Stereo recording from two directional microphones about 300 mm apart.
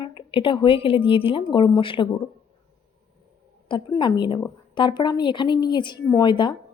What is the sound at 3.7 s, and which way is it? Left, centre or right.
A woman's voice, centre.